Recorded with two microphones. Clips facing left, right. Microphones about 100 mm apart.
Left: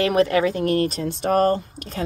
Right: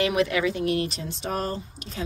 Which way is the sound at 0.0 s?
40° left (ahead or behind).